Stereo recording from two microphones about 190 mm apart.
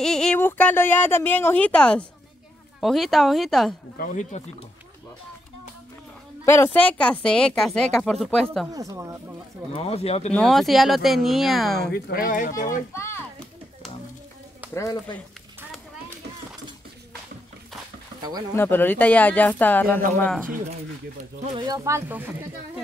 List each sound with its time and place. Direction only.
0.0 s speech: 5° left (ahead or behind)
4.0 s speech: 40° left (ahead or behind)
6.4 s speech: 15° left (ahead or behind)
8.7 s speech: 15° right (ahead or behind)
9.7 s speech: 30° left (ahead or behind)
10.3 s speech: centre (ahead or behind)
11.9 s speech: 50° left (ahead or behind)
12.9 s a sound: 15° left (ahead or behind)
14.7 s speech: 15° left (ahead or behind)
18.5 s speech: 10° left (ahead or behind)
21.5 s speech: 20° right (ahead or behind)